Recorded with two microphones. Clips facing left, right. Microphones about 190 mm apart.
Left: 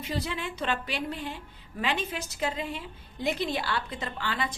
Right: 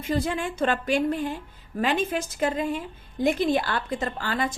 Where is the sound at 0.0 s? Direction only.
50° right (ahead or behind).